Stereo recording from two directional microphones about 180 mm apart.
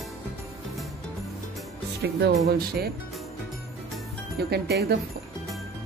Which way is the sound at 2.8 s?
60° right (ahead or behind).